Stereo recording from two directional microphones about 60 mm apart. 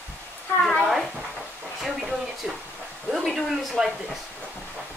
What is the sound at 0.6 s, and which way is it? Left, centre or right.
A woman's voice, centre.